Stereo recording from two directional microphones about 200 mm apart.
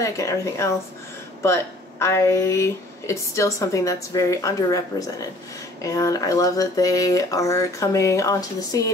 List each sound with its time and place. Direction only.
0.0 s speech: 15° left (ahead or behind)